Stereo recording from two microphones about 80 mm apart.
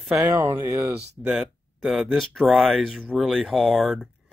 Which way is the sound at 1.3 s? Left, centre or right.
Centre.